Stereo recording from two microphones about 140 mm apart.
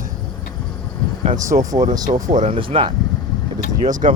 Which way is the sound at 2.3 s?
55° right (ahead or behind).